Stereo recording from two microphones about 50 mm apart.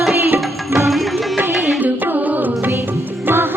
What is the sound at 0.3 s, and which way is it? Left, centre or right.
Music, right.